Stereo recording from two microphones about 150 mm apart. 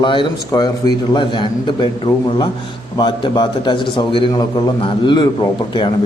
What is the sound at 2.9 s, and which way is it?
Speech, 30° left (ahead or behind).